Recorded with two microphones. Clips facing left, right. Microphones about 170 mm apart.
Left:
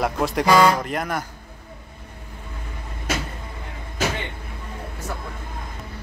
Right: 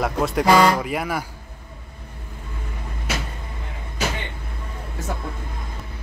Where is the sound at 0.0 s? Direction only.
Centre (ahead or behind).